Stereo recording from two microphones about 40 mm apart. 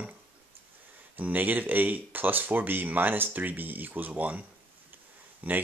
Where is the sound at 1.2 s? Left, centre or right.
Right.